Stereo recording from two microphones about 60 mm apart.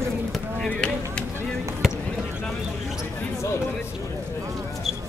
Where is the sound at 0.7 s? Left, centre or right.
Centre.